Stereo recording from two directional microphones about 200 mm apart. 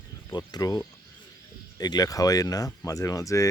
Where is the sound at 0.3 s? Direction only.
20° left (ahead or behind).